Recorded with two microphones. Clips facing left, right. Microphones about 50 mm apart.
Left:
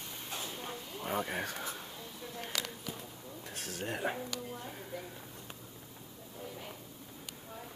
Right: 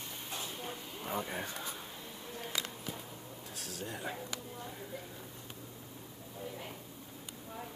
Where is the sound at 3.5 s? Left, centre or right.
Left.